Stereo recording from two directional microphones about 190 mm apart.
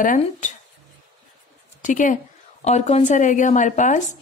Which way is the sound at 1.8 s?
40° left (ahead or behind).